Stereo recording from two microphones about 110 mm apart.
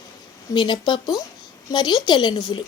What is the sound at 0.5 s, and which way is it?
Speech, 45° left (ahead or behind).